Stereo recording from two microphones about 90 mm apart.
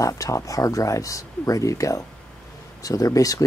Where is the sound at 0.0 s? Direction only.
40° left (ahead or behind).